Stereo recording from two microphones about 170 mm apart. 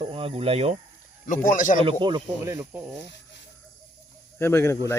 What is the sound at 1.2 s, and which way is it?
Speech, 50° left (ahead or behind).